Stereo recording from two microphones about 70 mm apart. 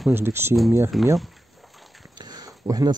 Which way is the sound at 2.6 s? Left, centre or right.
Right.